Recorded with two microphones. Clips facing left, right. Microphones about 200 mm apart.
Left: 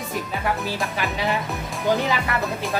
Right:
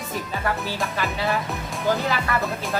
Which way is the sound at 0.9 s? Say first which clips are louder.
Even; 15° left (ahead or behind).